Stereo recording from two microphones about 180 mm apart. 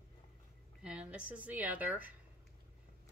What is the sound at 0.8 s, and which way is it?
A woman's voice, 5° right (ahead or behind).